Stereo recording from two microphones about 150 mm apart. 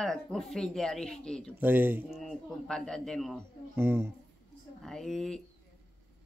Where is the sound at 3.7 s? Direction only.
15° right (ahead or behind).